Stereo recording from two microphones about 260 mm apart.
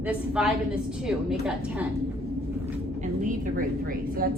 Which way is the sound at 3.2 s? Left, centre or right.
Right.